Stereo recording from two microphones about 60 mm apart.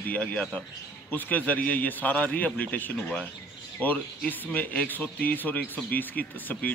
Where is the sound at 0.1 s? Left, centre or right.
Left.